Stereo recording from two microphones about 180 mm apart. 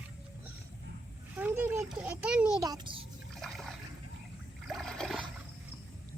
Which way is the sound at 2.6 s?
20° right (ahead or behind).